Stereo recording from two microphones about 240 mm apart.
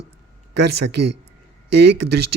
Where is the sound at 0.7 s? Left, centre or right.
Right.